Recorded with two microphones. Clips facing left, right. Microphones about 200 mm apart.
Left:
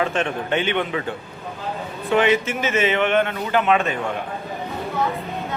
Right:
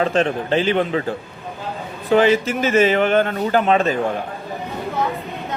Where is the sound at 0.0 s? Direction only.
35° right (ahead or behind).